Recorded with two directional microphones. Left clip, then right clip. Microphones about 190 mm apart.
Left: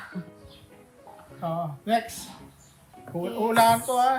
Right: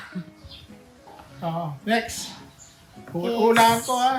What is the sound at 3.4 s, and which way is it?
Music, 15° left (ahead or behind).